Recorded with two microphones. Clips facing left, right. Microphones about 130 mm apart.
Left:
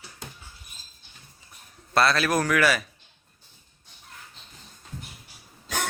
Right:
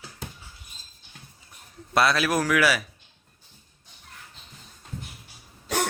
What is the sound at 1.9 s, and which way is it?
Speech, 10° right (ahead or behind).